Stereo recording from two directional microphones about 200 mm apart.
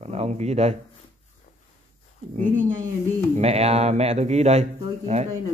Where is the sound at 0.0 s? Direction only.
30° right (ahead or behind).